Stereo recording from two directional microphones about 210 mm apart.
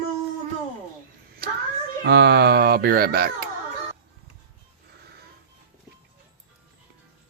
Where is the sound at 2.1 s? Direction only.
50° right (ahead or behind).